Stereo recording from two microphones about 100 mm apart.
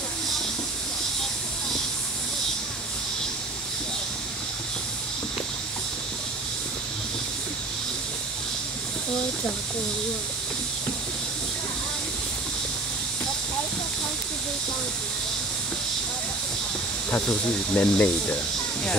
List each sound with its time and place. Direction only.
17.1 s speech: 20° left (ahead or behind)